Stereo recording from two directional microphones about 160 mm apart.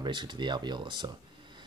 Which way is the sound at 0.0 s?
30° right (ahead or behind).